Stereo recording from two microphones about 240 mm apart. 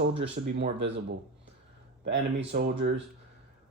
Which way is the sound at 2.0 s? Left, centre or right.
Right.